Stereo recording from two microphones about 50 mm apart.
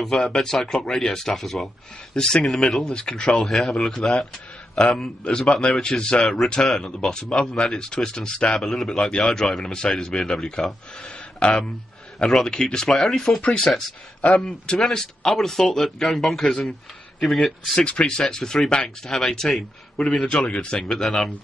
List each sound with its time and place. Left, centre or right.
0.0 s speech: centre
8.5 s speech: centre
11.0 s speech: centre
14.2 s a man's voice: centre
14.9 s speech: centre
17.7 s speech: centre
20.1 s a man's voice: left
21.0 s speech: centre